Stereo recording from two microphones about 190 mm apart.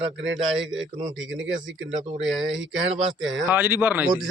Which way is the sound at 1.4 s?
75° right (ahead or behind).